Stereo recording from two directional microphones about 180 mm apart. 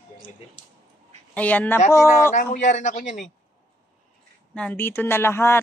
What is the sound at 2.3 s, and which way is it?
Speech, 45° left (ahead or behind).